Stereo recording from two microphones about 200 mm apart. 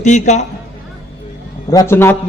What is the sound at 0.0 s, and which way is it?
Speech, 35° left (ahead or behind).